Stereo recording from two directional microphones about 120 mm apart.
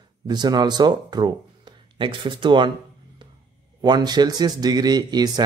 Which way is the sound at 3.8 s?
35° right (ahead or behind).